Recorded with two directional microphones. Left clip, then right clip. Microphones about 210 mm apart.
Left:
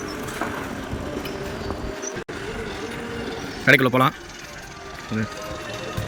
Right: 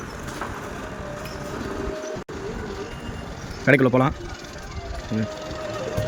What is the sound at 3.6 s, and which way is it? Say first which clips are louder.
Speech: left 2 dB; 15° right (ahead or behind).